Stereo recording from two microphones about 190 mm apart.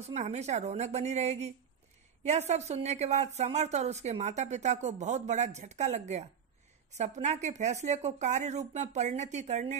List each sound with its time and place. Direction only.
0.0 s speech: 35° right (ahead or behind)